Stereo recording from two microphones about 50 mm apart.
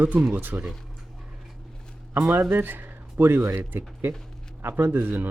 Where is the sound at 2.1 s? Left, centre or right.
Right.